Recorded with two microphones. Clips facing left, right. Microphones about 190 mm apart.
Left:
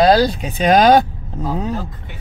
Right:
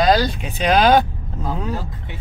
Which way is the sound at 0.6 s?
45° left (ahead or behind).